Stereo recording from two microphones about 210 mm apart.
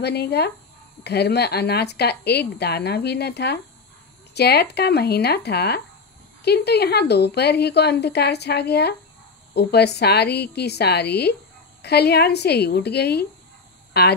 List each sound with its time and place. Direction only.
0.0 s a woman's voice: 50° left (ahead or behind)